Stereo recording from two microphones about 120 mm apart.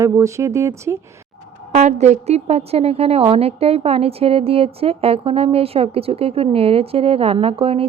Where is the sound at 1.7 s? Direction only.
75° right (ahead or behind).